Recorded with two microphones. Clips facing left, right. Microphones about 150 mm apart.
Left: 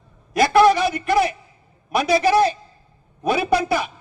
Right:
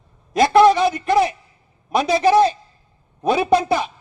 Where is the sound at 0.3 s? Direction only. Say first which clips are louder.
Right 2 dB; 20° right (ahead or behind).